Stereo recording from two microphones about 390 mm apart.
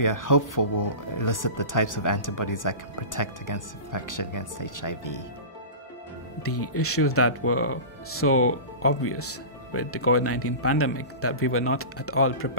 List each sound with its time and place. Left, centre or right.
0.0 s speech: left
6.4 s speech: left